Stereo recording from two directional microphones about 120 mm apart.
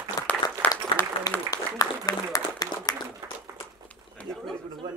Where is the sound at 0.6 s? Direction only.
15° left (ahead or behind).